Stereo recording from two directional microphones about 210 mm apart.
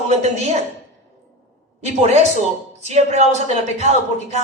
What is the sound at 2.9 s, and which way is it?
Speech, 30° right (ahead or behind).